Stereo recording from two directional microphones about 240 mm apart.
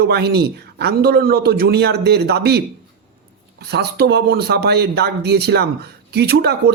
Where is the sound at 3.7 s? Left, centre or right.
Right.